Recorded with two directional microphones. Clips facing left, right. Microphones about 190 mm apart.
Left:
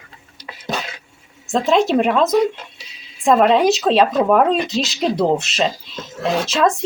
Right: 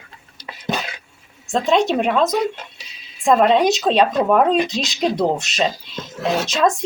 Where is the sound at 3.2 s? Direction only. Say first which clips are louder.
Left 1 dB; 5° left (ahead or behind).